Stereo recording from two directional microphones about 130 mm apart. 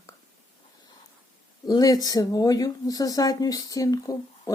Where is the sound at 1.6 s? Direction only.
30° left (ahead or behind).